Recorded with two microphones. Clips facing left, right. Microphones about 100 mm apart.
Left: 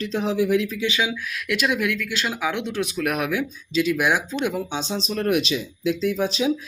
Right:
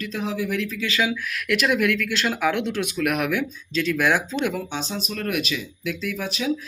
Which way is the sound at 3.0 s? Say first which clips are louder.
Right 1 dB; 30° left (ahead or behind).